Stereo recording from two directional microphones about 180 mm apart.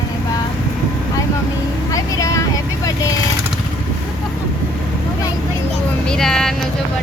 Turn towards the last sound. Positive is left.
turn(degrees=0)  # may be behind; listen again after turning